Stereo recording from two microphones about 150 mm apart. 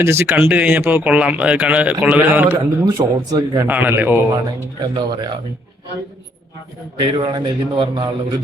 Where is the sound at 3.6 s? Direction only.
15° right (ahead or behind).